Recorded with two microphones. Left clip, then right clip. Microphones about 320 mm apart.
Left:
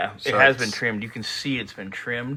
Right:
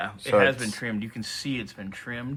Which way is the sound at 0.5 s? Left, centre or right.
Right.